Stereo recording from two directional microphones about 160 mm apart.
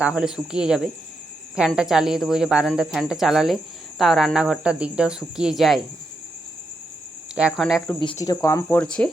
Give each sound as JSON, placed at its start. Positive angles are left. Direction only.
{"t": 0.0, "sound": "speech", "side_deg": -5}
{"t": 7.3, "sound": "speech", "side_deg": 0}
{"t": 8.2, "sound": "speech", "side_deg": 20}